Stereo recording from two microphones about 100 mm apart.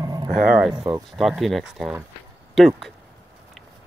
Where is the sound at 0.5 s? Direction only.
5° right (ahead or behind).